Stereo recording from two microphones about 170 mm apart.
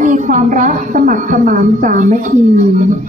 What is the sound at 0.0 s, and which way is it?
A woman's voice, 50° right (ahead or behind).